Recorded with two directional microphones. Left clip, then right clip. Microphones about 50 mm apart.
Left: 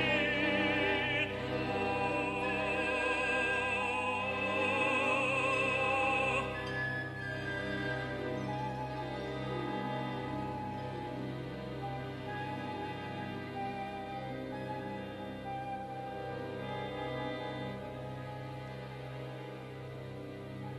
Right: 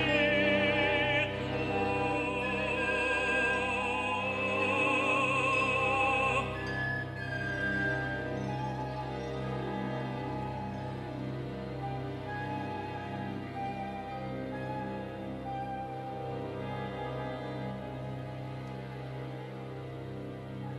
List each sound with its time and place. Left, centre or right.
0.0 s music: centre
7.4 s music: centre
9.8 s music: centre